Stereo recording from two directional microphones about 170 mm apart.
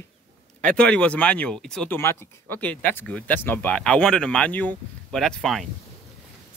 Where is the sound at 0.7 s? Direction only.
5° left (ahead or behind).